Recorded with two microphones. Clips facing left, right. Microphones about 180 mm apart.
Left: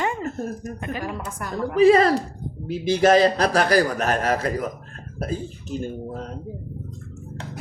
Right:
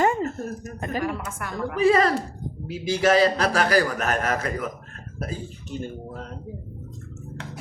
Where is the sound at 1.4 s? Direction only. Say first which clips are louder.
Left 6 dB; 40° left (ahead or behind).